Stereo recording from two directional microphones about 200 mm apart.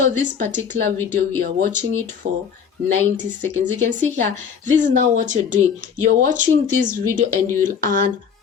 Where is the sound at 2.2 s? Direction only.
50° right (ahead or behind).